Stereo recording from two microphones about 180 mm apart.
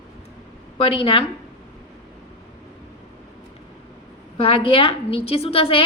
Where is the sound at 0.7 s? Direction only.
30° left (ahead or behind).